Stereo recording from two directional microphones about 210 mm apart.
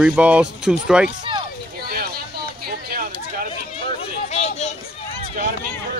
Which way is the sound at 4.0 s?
30° left (ahead or behind).